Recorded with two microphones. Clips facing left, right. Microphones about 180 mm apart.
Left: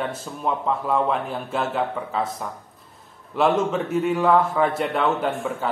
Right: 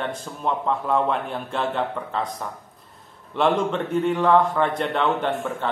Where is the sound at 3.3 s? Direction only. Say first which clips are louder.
Left 1 dB; 5° left (ahead or behind).